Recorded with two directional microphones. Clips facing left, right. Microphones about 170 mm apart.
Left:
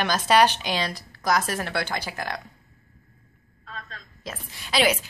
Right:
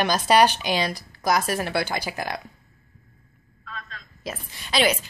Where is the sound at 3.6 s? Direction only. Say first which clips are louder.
Right 1 dB; 35° left (ahead or behind).